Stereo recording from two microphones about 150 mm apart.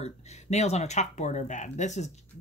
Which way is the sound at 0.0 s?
50° left (ahead or behind).